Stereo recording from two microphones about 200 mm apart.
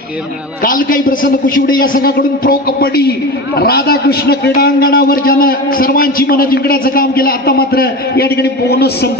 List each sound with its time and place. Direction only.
0.7 s a man's voice: 45° left (ahead or behind)